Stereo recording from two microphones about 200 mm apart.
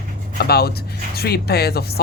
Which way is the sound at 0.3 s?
55° left (ahead or behind).